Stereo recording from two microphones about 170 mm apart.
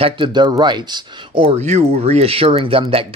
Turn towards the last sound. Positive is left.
turn(degrees=-35)  # may be behind; listen again after turning